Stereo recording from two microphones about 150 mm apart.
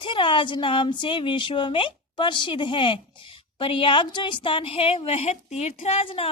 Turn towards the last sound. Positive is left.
turn(degrees=40)  # may be behind; listen again after turning